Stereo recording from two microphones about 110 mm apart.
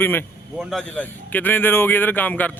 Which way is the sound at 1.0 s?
15° left (ahead or behind).